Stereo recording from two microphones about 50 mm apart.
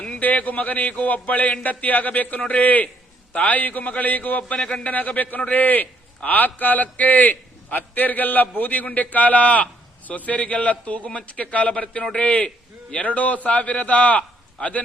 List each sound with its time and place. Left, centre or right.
0.2 s a man's voice: left